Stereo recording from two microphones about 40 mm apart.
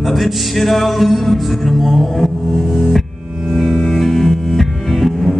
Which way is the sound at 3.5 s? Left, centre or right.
Centre.